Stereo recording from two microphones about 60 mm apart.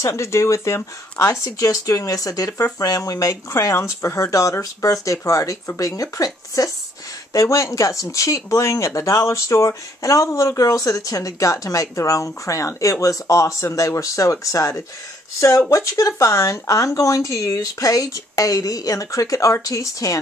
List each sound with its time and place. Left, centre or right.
0.0 s speech: left
1.3 s speech: left
2.5 s speech: left
7.3 s speech: left